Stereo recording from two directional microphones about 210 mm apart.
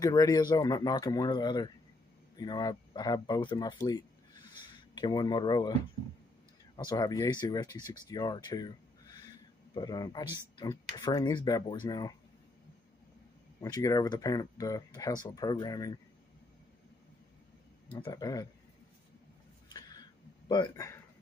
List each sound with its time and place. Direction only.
0.0 s speech: 15° left (ahead or behind)
6.8 s speech: 20° left (ahead or behind)
13.6 s speech: 15° left (ahead or behind)
18.0 s speech: 15° left (ahead or behind)
19.7 s a sound: 20° left (ahead or behind)